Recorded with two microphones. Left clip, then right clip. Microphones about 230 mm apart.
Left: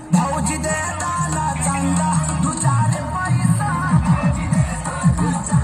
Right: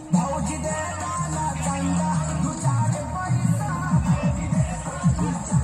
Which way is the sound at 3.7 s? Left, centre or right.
Left.